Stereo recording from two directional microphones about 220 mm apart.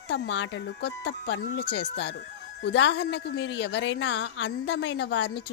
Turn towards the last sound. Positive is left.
turn(degrees=50)  # may be behind; listen again after turning